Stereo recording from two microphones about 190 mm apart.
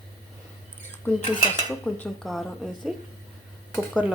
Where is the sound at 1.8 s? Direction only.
5° left (ahead or behind).